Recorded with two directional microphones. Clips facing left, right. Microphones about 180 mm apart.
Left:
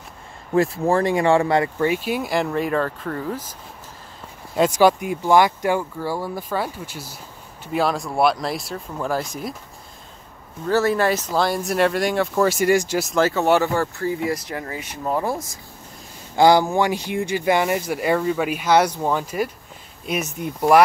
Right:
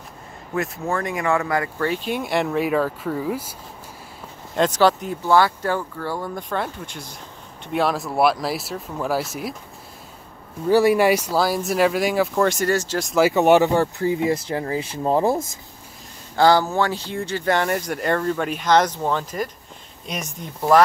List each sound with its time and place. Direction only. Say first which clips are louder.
0.6 s speech: left 6 dB; 30° left (ahead or behind)
1.9 s speech: left 2 dB; 5° left (ahead or behind); by 3.4 s 10° right (ahead or behind)
4.6 s speech: left 2 dB; 10° left (ahead or behind)
10.7 s speech: right 3 dB; 15° right (ahead or behind); by 13.1 s 10° left (ahead or behind)
13.3 s speech: right 3 dB; 20° right (ahead or behind)
16.3 s speech: left 2 dB; 15° left (ahead or behind)